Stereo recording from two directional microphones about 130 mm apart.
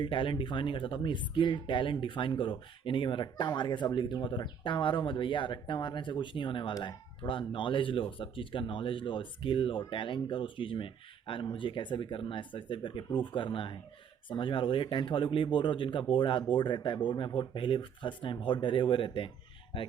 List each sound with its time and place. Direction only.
0.0 s speech: 40° left (ahead or behind)